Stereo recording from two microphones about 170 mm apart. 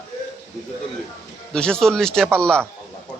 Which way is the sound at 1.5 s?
5° left (ahead or behind).